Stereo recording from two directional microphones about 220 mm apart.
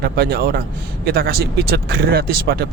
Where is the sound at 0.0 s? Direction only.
45° right (ahead or behind).